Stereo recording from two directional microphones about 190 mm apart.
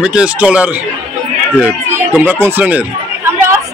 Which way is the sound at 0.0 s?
5° right (ahead or behind).